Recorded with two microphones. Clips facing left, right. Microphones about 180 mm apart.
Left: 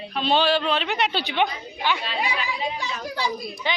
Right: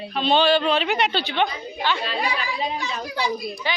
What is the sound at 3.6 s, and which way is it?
Speech, 20° left (ahead or behind).